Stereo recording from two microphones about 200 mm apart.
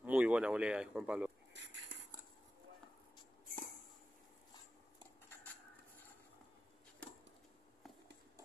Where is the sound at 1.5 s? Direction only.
60° right (ahead or behind).